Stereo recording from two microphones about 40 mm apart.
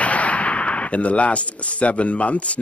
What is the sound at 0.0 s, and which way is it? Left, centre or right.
Speech, left.